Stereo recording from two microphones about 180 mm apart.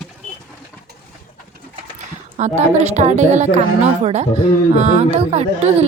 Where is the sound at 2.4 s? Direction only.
40° right (ahead or behind).